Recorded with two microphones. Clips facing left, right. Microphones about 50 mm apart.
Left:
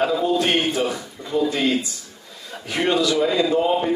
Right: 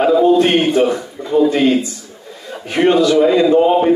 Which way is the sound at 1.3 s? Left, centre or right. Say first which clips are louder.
Right 8 dB; right.